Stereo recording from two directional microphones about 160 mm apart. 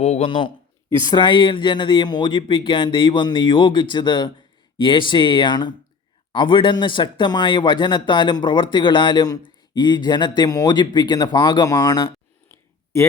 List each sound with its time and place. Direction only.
0.0 s speech: 45° left (ahead or behind)
0.9 s speech: 20° left (ahead or behind)